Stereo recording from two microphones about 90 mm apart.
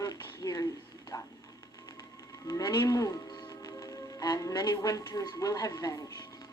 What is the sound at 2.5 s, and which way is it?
Speech, 45° left (ahead or behind).